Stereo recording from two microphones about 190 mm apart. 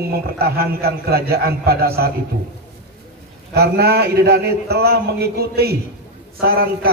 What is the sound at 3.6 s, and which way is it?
A man's voice, 55° right (ahead or behind).